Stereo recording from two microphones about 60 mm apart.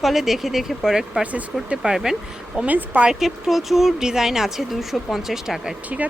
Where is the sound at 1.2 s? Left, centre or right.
Right.